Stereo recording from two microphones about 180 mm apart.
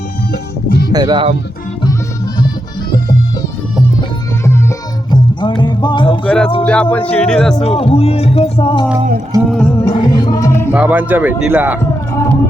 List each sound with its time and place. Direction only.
0.7 s music: 60° left (ahead or behind)
0.9 s speech: 25° right (ahead or behind)
5.1 s music: 25° left (ahead or behind)
6.2 s music: 5° left (ahead or behind)
6.6 s speech: 5° left (ahead or behind)
7.6 s speech: 35° left (ahead or behind)
9.5 s music: 5° left (ahead or behind)
9.8 s music: 20° left (ahead or behind)
10.7 s speech: 10° right (ahead or behind)